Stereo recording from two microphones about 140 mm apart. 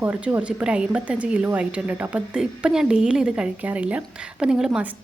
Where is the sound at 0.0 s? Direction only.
10° right (ahead or behind).